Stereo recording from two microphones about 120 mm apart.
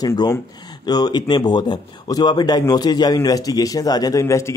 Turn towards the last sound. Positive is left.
turn(degrees=25)  # may be behind; listen again after turning